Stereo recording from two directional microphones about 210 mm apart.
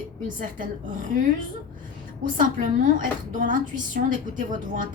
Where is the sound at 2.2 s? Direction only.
40° right (ahead or behind).